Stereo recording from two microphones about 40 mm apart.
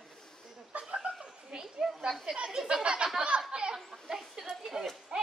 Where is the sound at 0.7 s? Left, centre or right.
Right.